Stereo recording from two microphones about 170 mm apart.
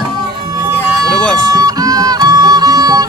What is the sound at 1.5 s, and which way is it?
Music, 20° right (ahead or behind).